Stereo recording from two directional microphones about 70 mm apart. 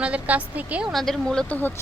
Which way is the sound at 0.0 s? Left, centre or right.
Centre.